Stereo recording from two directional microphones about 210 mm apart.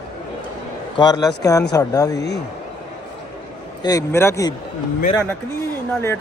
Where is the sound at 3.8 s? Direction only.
15° left (ahead or behind).